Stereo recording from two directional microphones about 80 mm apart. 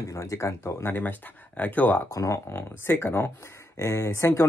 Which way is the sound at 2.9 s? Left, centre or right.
Left.